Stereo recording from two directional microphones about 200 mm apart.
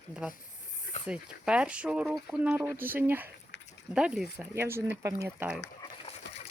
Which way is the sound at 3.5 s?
60° left (ahead or behind).